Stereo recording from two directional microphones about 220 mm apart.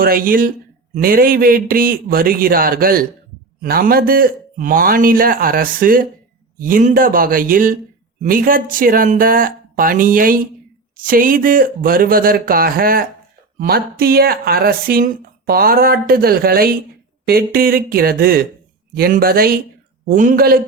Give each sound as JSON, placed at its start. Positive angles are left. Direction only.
{"t": 0.0, "sound": "a man's voice", "side_deg": -40}